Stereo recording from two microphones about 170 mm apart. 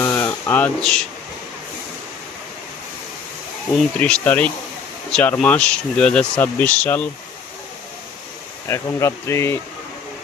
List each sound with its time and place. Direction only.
0.0 s a sound: 15° left (ahead or behind)
3.7 s speech: 5° left (ahead or behind)
8.6 s speech: 15° left (ahead or behind)